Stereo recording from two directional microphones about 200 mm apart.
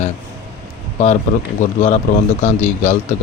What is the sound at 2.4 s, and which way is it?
Speech, 35° left (ahead or behind).